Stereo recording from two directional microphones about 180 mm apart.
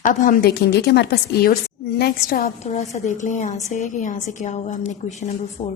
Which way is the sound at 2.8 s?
40° left (ahead or behind).